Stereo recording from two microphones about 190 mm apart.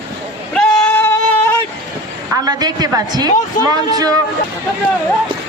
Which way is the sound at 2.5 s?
20° right (ahead or behind).